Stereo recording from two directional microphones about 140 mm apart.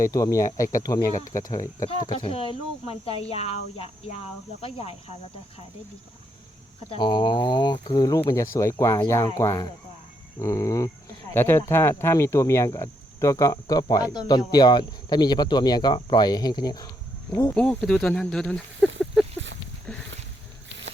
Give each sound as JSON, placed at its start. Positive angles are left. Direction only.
{"t": 0.0, "sound": "speech", "side_deg": 25}
{"t": 2.2, "sound": "speech", "side_deg": 40}
{"t": 6.9, "sound": "speech", "side_deg": 35}
{"t": 17.3, "sound": "speech", "side_deg": 10}